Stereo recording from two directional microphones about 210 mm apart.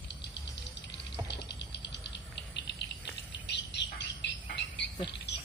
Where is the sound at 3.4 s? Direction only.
55° left (ahead or behind).